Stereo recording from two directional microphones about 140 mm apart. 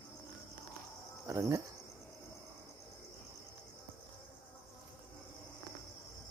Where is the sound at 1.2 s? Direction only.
20° right (ahead or behind).